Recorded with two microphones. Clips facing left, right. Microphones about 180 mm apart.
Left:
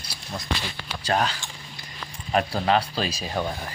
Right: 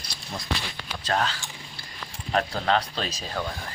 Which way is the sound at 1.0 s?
10° left (ahead or behind).